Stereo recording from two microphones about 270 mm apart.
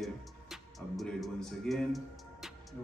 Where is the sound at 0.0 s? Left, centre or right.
Centre.